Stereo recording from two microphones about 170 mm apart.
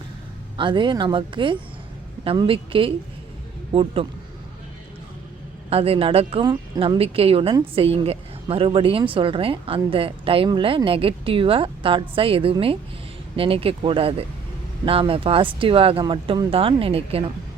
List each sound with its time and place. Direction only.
0.5 s a woman's voice: 30° right (ahead or behind)
5.7 s a woman's voice: 35° right (ahead or behind)